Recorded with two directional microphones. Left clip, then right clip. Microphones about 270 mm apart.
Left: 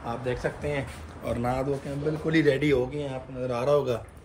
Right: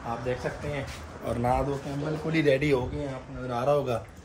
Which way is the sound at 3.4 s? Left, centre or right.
Centre.